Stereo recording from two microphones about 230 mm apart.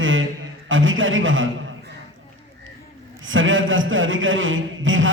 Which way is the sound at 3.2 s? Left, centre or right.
Right.